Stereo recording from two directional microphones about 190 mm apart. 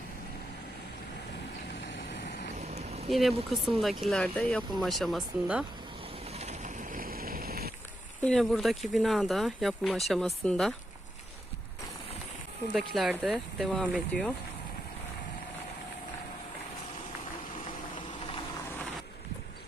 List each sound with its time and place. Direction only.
2.6 s vehicle: 35° right (ahead or behind)
3.1 s speech: centre (ahead or behind)
6.3 s boat: 35° right (ahead or behind); by 7.7 s 55° right (ahead or behind)
8.2 s speech: centre (ahead or behind)
12.7 s speech: centre (ahead or behind)